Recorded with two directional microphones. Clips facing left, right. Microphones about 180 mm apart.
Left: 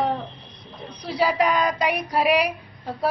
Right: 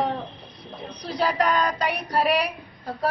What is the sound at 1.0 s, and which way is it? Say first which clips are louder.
A woman's voice: left 2 dB; 10° left (ahead or behind).